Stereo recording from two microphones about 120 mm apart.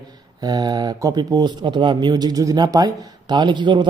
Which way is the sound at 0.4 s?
35° right (ahead or behind).